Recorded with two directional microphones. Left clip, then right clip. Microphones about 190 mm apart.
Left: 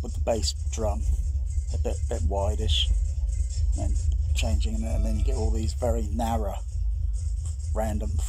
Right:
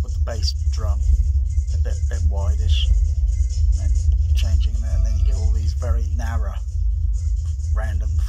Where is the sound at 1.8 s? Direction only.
30° left (ahead or behind).